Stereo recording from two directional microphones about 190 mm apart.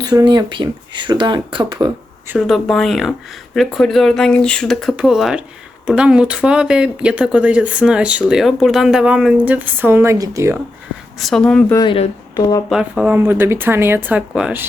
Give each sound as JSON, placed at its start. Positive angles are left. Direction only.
{"t": 0.0, "sound": "speech", "side_deg": -20}
{"t": 2.5, "sound": "speech", "side_deg": 0}
{"t": 11.2, "sound": "speech", "side_deg": 0}
{"t": 11.7, "sound": "speech", "side_deg": 25}
{"t": 12.6, "sound": "speech", "side_deg": -5}